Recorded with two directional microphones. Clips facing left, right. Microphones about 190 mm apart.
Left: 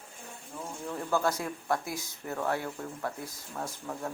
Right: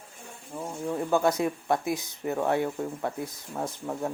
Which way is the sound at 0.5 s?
25° right (ahead or behind).